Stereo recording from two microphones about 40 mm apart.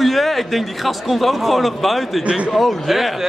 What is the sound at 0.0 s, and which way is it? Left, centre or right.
A man's voice, centre.